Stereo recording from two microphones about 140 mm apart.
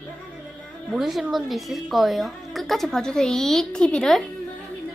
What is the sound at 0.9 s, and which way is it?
A child's voice, 5° right (ahead or behind).